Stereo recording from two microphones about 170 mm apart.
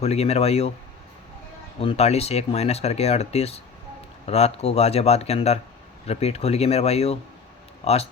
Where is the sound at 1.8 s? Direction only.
35° left (ahead or behind).